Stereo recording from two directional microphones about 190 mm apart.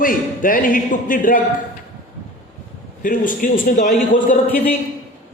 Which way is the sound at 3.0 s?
45° left (ahead or behind).